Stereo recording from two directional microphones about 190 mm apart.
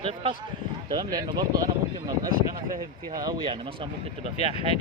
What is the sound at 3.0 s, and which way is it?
Speech, 20° right (ahead or behind).